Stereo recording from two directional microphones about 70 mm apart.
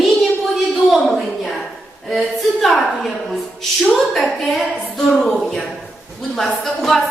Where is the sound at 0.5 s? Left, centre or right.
Centre.